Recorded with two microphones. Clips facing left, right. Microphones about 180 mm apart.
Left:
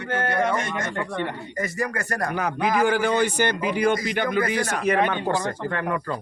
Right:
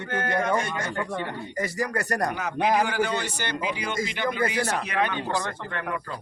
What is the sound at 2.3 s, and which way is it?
Speech, 50° left (ahead or behind).